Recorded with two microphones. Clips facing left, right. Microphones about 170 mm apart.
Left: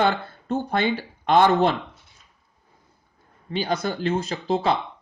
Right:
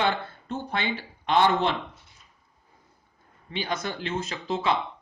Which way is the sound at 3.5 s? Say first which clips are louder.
Left 6 dB; 35° left (ahead or behind).